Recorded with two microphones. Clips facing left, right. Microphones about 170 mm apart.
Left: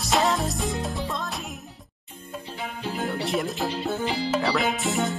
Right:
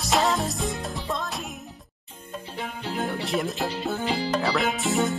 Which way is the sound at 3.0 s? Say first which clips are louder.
Even; centre (ahead or behind).